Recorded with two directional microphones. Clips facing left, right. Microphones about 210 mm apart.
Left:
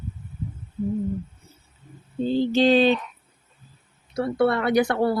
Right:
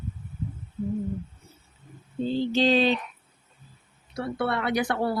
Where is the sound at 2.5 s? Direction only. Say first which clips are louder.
Left 4 dB; 50° left (ahead or behind).